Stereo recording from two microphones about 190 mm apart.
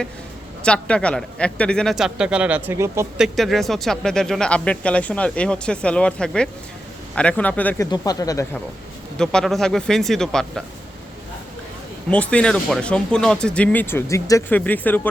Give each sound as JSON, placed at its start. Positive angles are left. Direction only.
{"t": 0.6, "sound": "speech", "side_deg": 5}
{"t": 3.2, "sound": "speech", "side_deg": 0}
{"t": 7.9, "sound": "speech", "side_deg": 20}
{"t": 9.1, "sound": "speech", "side_deg": 5}
{"t": 12.1, "sound": "speech", "side_deg": 5}